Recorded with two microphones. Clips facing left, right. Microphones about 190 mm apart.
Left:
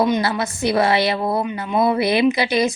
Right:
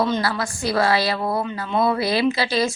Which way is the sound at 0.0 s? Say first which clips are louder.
Left 3 dB; 20° left (ahead or behind).